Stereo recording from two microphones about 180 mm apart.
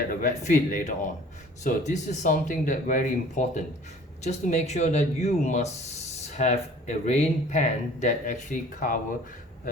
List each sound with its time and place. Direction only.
0.1 s speech: 45° left (ahead or behind)